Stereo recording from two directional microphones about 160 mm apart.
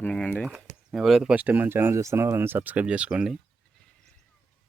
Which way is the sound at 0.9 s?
Centre (ahead or behind).